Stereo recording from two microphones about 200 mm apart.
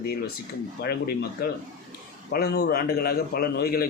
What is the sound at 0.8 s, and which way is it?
A man's voice, 50° left (ahead or behind).